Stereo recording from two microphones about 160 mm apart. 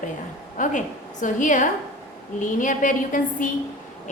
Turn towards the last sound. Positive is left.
turn(degrees=55)  # may be behind; listen again after turning